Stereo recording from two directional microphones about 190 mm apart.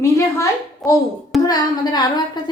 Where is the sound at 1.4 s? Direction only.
20° left (ahead or behind).